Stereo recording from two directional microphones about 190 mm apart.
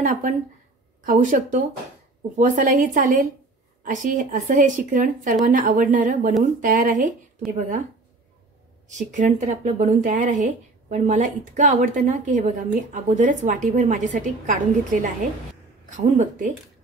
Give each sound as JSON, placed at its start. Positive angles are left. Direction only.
{"t": 0.0, "sound": "speech", "side_deg": -40}
{"t": 8.8, "sound": "speech", "side_deg": -40}
{"t": 16.0, "sound": "speech", "side_deg": -40}